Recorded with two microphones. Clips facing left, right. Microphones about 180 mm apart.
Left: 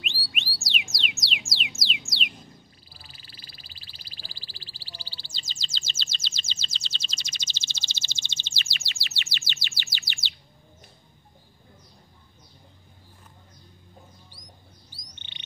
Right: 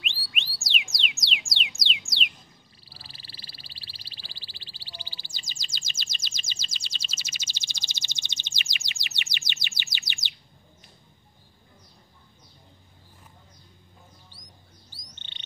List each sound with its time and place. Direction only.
0.0 s music: centre (ahead or behind)
2.9 s a sound: 30° right (ahead or behind)
15.1 s bird: 15° left (ahead or behind)